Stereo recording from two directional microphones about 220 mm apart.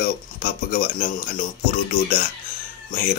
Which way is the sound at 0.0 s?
45° left (ahead or behind).